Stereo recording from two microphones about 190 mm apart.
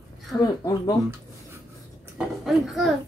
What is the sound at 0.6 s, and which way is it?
Speech, 20° left (ahead or behind).